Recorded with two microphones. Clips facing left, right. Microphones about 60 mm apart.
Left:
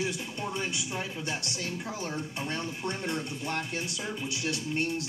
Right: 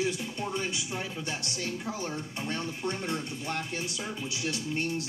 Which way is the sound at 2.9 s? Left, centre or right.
Centre.